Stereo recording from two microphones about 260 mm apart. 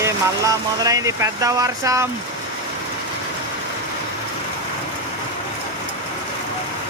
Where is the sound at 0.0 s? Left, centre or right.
Centre.